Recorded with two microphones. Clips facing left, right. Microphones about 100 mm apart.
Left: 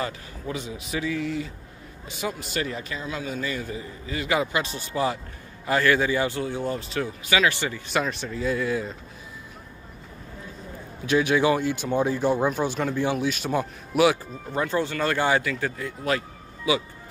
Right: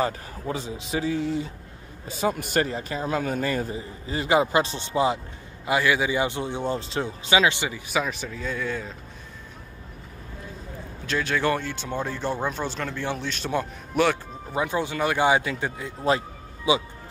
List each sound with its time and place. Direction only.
0.0 s speech: 35° right (ahead or behind)
2.3 s speech: 55° right (ahead or behind)
2.6 s speech: 40° right (ahead or behind)
3.7 s a man's voice: 30° right (ahead or behind)
7.9 s speech: centre (ahead or behind)
11.1 s speech: 15° left (ahead or behind)
14.5 s speech: 15° right (ahead or behind)